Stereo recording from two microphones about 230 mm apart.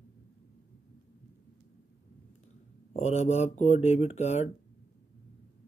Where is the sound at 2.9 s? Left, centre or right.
Left.